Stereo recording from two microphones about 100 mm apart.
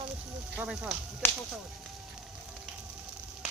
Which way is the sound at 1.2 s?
20° left (ahead or behind).